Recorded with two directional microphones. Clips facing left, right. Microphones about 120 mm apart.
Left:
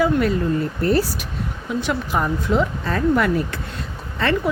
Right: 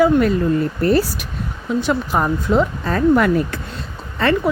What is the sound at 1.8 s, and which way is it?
Speech, 40° right (ahead or behind).